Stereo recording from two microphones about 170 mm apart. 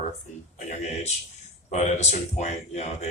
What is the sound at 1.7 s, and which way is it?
Speech, 45° left (ahead or behind).